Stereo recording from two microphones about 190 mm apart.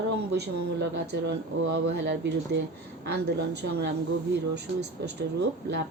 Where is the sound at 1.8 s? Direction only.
60° right (ahead or behind).